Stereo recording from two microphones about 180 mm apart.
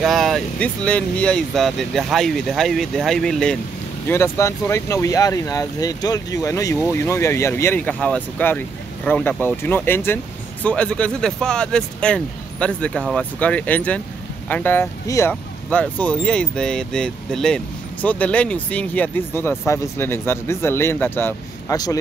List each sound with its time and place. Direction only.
0.0 s speech: centre (ahead or behind)
4.1 s speech: 15° left (ahead or behind)